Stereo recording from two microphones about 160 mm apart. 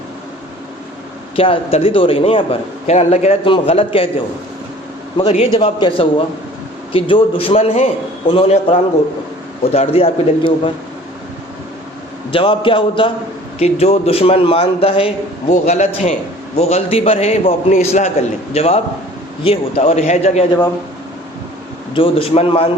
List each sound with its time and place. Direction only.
1.4 s a man's voice: 35° left (ahead or behind)
5.1 s a man's voice: 35° left (ahead or behind)
12.3 s a man's voice: 35° left (ahead or behind)
15.4 s a man's voice: 45° left (ahead or behind)
21.9 s a man's voice: 35° left (ahead or behind)